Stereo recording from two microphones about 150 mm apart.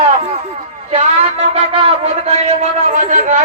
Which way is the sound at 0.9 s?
45° right (ahead or behind).